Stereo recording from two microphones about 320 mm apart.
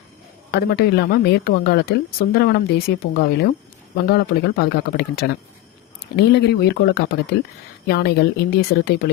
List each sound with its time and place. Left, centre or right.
0.5 s a woman's voice: left